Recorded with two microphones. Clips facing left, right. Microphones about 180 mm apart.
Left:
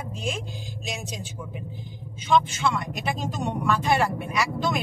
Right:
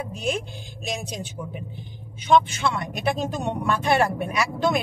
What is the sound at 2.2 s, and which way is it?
Speech, 65° right (ahead or behind).